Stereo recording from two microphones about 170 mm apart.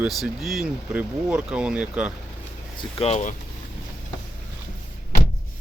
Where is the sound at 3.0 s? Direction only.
40° left (ahead or behind).